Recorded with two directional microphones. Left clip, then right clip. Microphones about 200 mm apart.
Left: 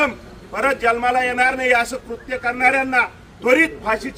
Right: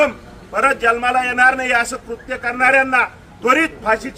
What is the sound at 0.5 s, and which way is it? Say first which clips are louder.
A man's voice: right 3 dB; 20° right (ahead or behind).